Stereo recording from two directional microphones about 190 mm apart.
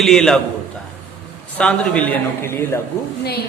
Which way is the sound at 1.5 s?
5° left (ahead or behind).